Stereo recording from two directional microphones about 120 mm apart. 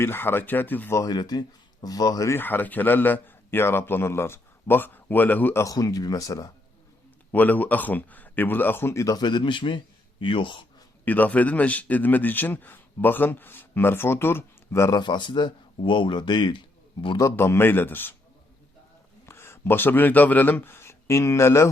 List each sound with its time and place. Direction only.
0.0 s speech: 20° left (ahead or behind)
5.6 s speech: 30° left (ahead or behind)
7.3 s speech: 15° left (ahead or behind); by 10.7 s 45° left (ahead or behind)
11.0 s speech: 15° left (ahead or behind)
14.9 s speech: 40° left (ahead or behind)
17.2 s speech: 20° left (ahead or behind)
19.2 s speech: 20° left (ahead or behind)